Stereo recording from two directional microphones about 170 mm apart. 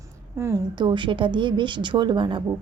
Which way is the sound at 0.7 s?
30° right (ahead or behind).